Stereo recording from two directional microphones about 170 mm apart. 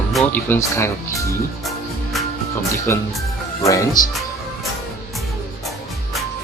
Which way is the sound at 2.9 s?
15° left (ahead or behind).